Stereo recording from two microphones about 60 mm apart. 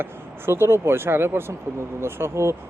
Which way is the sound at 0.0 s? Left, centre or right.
Right.